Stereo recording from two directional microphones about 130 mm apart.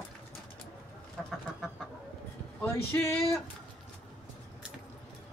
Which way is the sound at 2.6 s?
20° left (ahead or behind).